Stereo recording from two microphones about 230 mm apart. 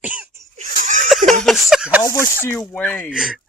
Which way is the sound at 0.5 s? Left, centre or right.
Right.